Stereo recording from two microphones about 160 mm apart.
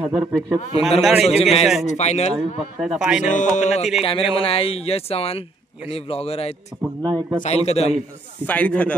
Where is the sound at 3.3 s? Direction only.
50° left (ahead or behind).